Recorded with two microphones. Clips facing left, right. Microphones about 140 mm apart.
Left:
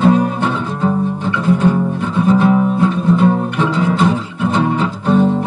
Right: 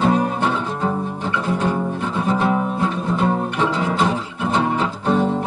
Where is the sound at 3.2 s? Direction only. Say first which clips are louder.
Left 5 dB; 35° right (ahead or behind).